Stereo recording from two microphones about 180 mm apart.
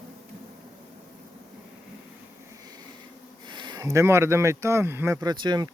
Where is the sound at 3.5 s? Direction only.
25° right (ahead or behind).